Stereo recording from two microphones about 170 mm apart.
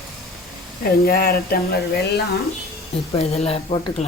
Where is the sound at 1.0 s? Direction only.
65° left (ahead or behind).